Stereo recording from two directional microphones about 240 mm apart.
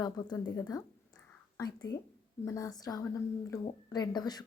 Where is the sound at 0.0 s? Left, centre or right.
Centre.